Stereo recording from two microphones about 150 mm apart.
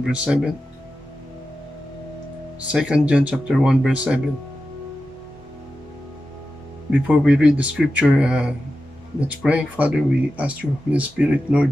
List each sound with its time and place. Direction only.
0.0 s speech: 5° right (ahead or behind)
2.7 s speech: 5° right (ahead or behind)
6.9 s speech: 5° right (ahead or behind)